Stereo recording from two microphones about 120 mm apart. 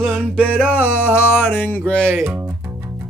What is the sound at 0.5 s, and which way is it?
Music, 10° right (ahead or behind).